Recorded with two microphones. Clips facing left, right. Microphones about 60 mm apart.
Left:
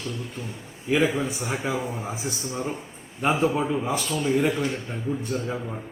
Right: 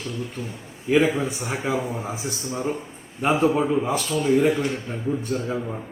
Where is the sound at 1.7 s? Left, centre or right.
Right.